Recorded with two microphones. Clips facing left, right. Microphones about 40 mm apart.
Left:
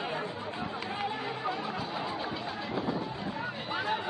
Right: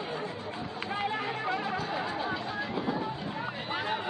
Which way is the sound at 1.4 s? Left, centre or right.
Centre.